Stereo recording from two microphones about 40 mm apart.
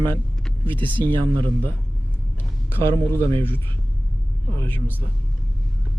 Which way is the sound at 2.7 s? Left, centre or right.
Left.